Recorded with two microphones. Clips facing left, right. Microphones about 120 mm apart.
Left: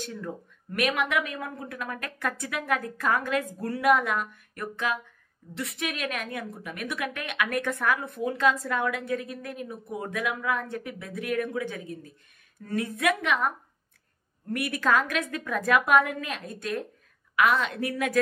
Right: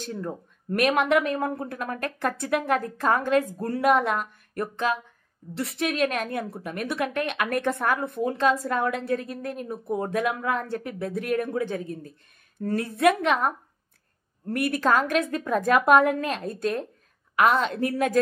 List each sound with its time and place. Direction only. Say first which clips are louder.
0.0 s speech: right 3 dB; 35° right (ahead or behind)